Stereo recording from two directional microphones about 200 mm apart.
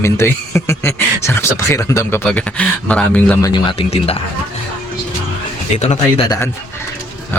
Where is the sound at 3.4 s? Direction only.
25° left (ahead or behind).